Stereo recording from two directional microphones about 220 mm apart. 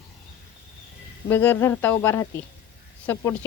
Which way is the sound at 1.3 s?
10° left (ahead or behind).